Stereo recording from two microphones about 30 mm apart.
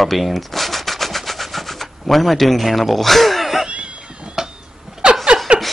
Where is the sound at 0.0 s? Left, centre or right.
Centre.